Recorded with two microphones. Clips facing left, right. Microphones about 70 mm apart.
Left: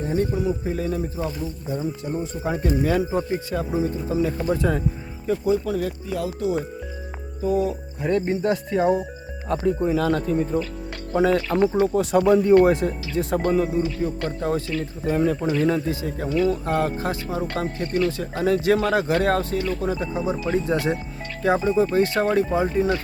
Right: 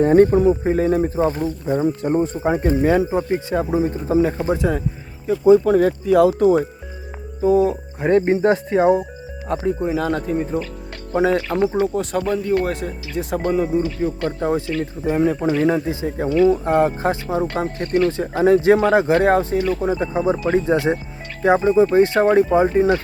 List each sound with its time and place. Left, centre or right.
0.0 s speech: right
2.3 s speech: right
5.3 s speech: centre
5.6 s speech: right
6.1 s speech: right
7.4 s speech: right
9.5 s speech: centre
11.9 s speech: centre
12.7 s speech: centre
13.7 s speech: right